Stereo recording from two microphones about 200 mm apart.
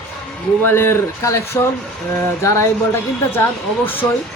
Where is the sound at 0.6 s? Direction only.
10° left (ahead or behind).